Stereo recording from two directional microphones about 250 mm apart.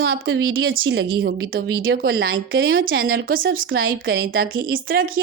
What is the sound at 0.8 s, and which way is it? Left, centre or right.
Speech, right.